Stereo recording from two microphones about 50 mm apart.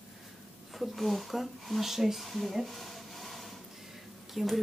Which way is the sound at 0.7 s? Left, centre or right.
Centre.